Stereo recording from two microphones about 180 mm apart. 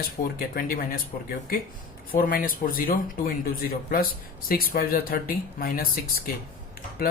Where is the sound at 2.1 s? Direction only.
55° left (ahead or behind).